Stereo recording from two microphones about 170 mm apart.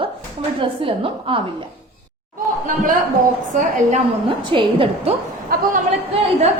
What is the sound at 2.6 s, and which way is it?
A woman's voice, 50° right (ahead or behind).